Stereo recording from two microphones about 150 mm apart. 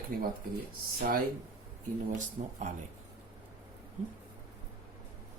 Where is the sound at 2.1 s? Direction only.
55° right (ahead or behind).